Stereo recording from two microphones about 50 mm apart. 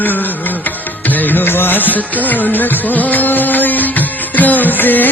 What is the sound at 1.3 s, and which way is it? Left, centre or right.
Music, left.